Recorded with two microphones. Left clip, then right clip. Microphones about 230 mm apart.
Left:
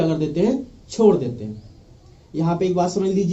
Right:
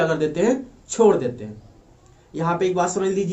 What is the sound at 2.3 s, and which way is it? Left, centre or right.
Speech, centre.